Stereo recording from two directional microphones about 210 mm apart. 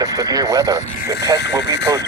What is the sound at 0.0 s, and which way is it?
Speech, 15° right (ahead or behind).